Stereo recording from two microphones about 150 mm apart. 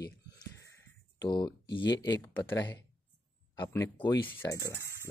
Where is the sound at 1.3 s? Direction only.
30° left (ahead or behind).